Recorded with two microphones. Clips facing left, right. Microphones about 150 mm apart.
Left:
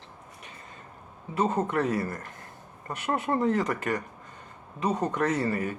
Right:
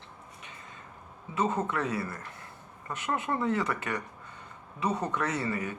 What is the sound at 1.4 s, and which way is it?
Speech, 35° left (ahead or behind).